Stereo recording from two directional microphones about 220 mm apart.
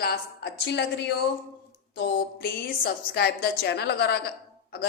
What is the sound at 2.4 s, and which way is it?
A woman's voice, 45° left (ahead or behind).